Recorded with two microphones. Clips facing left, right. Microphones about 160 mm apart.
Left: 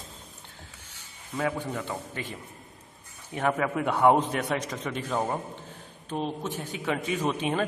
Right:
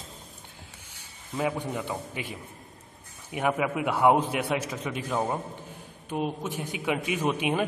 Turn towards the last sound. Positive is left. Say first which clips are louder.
# right 1 dB
turn(degrees=-10)  # may be behind; listen again after turning